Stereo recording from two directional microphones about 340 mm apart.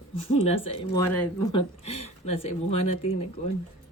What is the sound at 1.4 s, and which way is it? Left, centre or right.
Speech, centre.